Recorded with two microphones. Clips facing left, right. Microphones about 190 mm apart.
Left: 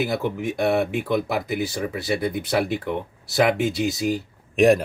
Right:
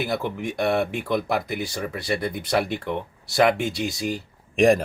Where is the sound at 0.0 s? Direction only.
Centre (ahead or behind).